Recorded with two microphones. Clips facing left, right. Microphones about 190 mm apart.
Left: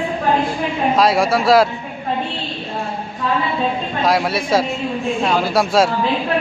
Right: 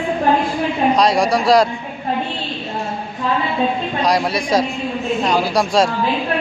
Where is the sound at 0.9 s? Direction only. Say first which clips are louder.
Left 3 dB; 5° left (ahead or behind).